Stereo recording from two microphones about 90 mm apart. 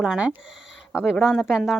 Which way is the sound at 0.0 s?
10° right (ahead or behind).